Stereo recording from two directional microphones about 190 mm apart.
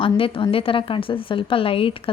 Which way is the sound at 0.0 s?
25° left (ahead or behind).